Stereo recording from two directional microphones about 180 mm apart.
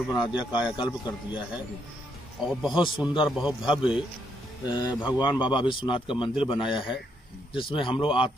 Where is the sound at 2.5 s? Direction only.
5° right (ahead or behind).